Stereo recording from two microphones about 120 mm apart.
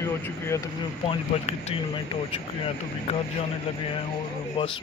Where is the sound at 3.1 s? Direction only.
65° left (ahead or behind).